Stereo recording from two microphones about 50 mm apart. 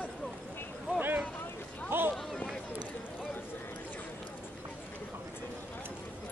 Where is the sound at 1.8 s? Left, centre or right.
Right.